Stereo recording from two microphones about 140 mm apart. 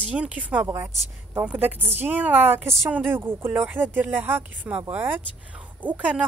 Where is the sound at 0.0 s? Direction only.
10° right (ahead or behind).